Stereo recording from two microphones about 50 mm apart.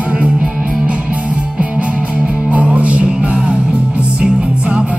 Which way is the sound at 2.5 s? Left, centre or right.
Right.